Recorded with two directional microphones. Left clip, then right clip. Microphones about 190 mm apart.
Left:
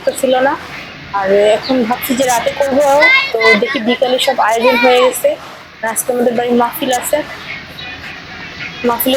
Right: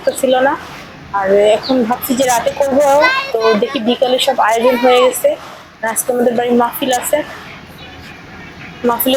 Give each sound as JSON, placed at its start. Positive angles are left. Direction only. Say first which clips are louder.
{"t": 0.0, "sound": "a woman's voice", "louder": "even", "side_deg": 0}
{"t": 8.8, "sound": "a woman's voice", "louder": "even", "side_deg": 0}